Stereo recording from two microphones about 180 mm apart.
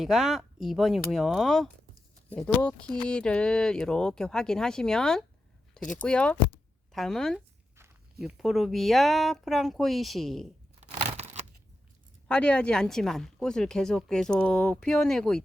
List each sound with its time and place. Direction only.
0.0 s speech: centre (ahead or behind)
11.2 s a sound: 35° right (ahead or behind)
12.3 s speech: 5° left (ahead or behind)